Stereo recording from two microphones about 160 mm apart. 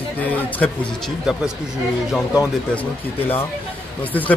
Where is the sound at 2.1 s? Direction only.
5° right (ahead or behind).